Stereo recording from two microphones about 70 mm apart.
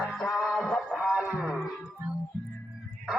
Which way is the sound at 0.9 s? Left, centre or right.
Centre.